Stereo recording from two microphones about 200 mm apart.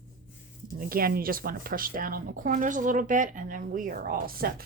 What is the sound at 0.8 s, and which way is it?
Speech, 45° right (ahead or behind).